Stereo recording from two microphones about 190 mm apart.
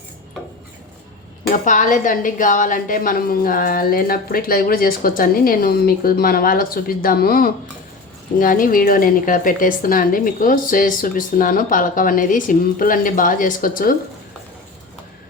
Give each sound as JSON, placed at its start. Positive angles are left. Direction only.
{"t": 1.5, "sound": "a woman's voice", "side_deg": 40}